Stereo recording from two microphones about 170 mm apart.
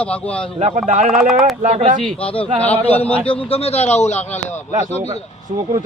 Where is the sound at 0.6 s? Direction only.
40° right (ahead or behind).